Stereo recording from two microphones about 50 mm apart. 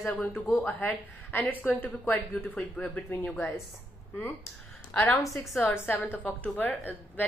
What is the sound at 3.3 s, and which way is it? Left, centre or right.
Speech, left.